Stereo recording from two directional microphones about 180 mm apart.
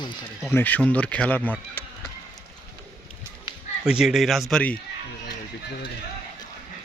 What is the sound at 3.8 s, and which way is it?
Speech, 5° right (ahead or behind).